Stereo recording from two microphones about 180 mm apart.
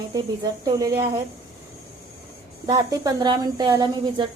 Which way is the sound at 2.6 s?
20° right (ahead or behind).